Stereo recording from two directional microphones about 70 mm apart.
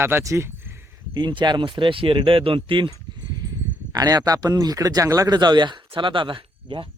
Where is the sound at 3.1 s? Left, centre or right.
Right.